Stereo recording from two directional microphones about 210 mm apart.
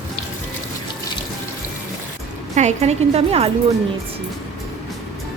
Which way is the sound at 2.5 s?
30° right (ahead or behind).